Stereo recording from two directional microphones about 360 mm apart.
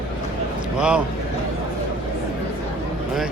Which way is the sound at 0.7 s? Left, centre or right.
Centre.